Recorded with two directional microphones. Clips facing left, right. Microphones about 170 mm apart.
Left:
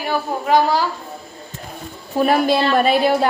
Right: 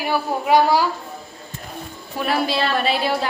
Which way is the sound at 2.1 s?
45° left (ahead or behind).